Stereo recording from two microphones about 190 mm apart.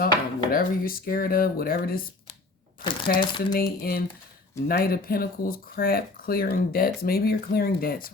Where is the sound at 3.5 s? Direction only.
50° left (ahead or behind).